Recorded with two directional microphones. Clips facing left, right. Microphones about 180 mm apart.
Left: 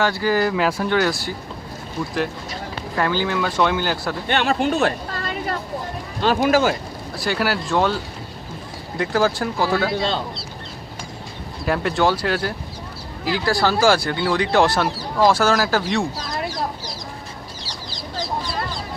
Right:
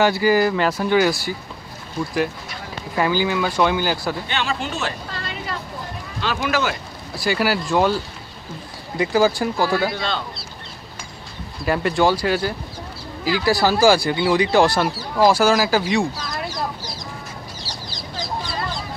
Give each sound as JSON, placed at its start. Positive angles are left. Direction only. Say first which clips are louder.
{"t": 0.0, "sound": "speech", "louder": "right 3 dB", "side_deg": -10}
{"t": 2.9, "sound": "speech", "louder": "right 2 dB", "side_deg": -5}
{"t": 4.3, "sound": "speech", "louder": "left 6 dB", "side_deg": 55}
{"t": 7.2, "sound": "speech", "louder": "right 2 dB", "side_deg": 0}
{"t": 9.9, "sound": "speech", "louder": "left 3 dB", "side_deg": 30}
{"t": 11.6, "sound": "speech", "louder": "right 1 dB", "side_deg": 0}